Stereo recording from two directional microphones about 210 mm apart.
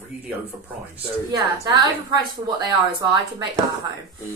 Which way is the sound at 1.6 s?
20° right (ahead or behind).